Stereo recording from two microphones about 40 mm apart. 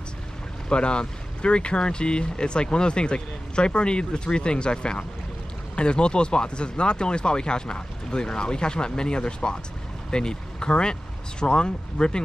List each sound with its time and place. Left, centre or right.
0.7 s speech: left